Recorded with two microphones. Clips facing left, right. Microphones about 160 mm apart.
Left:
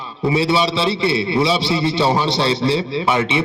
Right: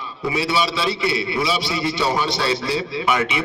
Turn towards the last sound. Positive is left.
turn(degrees=30)  # may be behind; listen again after turning